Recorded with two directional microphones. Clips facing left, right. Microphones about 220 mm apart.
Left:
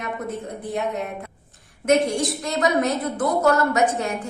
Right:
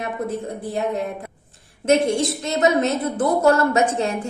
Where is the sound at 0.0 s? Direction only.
30° right (ahead or behind).